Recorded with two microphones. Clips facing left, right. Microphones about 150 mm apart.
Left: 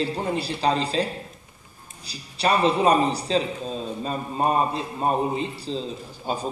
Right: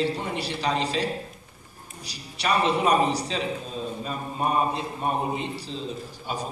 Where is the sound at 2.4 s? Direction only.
30° left (ahead or behind).